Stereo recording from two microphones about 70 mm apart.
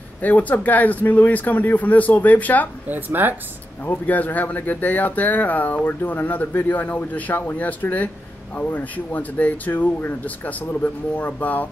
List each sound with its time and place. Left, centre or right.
0.2 s speech: left
2.9 s speech: right
3.8 s speech: left